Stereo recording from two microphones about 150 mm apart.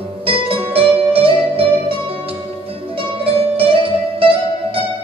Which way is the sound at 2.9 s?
35° right (ahead or behind).